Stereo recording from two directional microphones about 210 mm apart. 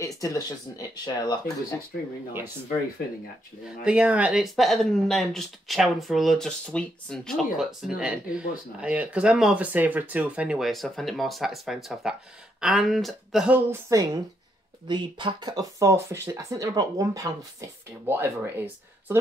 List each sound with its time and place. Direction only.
0.0 s speech: 15° left (ahead or behind)
3.8 s speech: 5° right (ahead or behind)